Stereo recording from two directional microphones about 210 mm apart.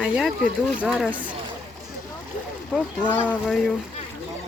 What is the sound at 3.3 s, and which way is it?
Speech, centre (ahead or behind).